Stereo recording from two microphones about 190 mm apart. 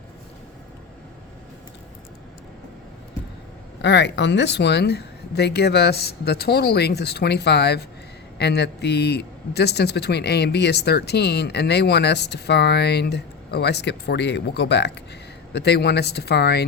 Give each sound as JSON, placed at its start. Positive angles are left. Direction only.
{"t": 3.8, "sound": "a man's voice", "side_deg": 65}